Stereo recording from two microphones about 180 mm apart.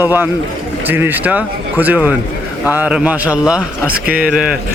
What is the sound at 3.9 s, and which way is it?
Speech, 55° right (ahead or behind).